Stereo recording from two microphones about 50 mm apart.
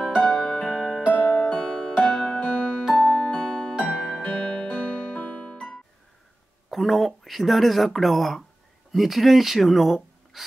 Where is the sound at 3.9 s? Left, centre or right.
Centre.